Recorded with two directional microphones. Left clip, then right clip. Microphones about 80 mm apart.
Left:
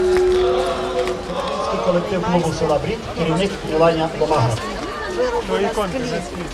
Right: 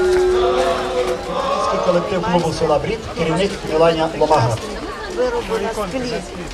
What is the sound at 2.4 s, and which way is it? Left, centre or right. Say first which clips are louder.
A man's voice: right 2 dB; right.